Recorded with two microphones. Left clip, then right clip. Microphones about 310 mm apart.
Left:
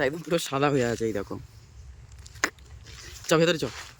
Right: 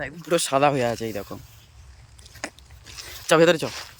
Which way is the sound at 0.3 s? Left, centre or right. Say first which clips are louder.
Right 11 dB; centre.